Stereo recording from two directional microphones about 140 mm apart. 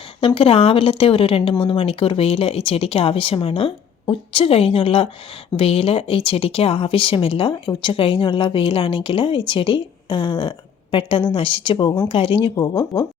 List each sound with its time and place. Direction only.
0.2 s speech: 40° left (ahead or behind); by 13.1 s 25° left (ahead or behind)